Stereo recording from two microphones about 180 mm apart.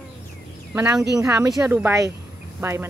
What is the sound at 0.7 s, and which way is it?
Speech, 10° right (ahead or behind).